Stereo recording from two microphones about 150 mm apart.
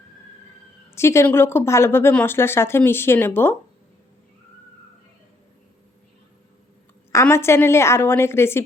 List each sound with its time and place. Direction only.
0.9 s speech: 15° left (ahead or behind)
7.1 s speech: 20° left (ahead or behind)